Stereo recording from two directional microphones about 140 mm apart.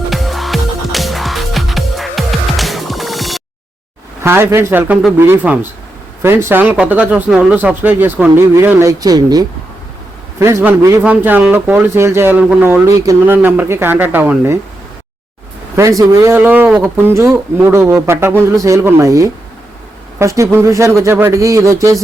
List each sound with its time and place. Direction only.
0.1 s music: centre (ahead or behind)
4.2 s speech: 20° right (ahead or behind)
10.4 s speech: 15° right (ahead or behind)
15.7 s speech: 20° right (ahead or behind)